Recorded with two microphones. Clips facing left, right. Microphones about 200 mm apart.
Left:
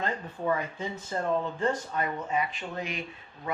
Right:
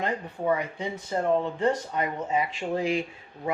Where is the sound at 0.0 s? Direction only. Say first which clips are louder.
Right 3 dB; 15° right (ahead or behind).